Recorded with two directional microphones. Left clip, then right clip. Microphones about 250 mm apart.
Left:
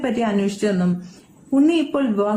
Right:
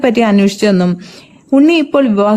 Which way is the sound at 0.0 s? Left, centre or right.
Right.